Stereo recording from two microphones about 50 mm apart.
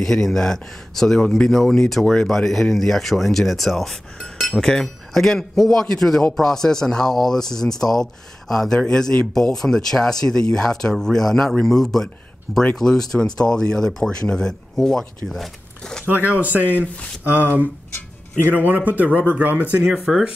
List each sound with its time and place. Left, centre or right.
0.0 s speech: centre
15.8 s a sound: centre
16.1 s a man's voice: right
16.8 s speech: left
18.4 s a man's voice: right
19.8 s speech: centre